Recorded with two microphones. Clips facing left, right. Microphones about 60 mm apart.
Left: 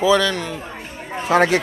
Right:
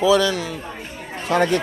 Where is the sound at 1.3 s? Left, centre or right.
Left.